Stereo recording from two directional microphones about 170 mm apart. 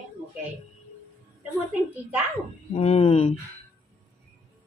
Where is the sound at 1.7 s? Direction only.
10° right (ahead or behind).